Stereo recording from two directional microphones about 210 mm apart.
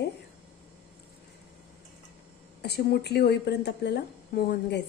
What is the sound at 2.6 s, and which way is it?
Speech, 50° left (ahead or behind).